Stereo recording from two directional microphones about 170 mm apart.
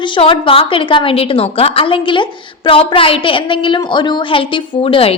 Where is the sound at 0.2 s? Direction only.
30° left (ahead or behind).